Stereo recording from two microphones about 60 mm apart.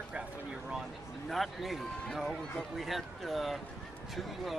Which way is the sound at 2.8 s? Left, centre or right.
Centre.